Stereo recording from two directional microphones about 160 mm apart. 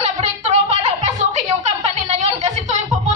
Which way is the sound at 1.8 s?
45° right (ahead or behind).